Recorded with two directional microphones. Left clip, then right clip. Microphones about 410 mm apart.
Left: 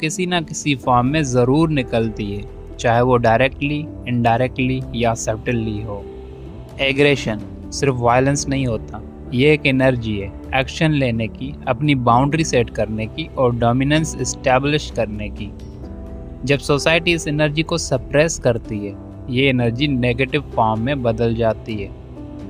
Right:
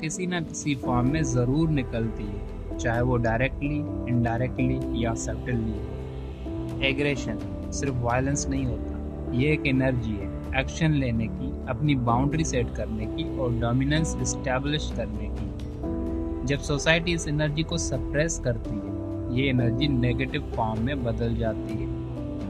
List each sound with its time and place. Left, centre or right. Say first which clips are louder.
0.0 s speech: left 10 dB; centre
6.7 s speech: left 11 dB; left
16.4 s speech: left 13 dB; centre